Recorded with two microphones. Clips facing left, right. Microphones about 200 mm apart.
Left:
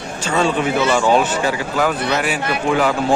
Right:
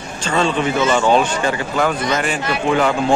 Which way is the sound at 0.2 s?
10° left (ahead or behind).